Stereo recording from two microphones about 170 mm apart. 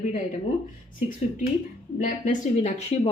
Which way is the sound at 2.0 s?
50° left (ahead or behind).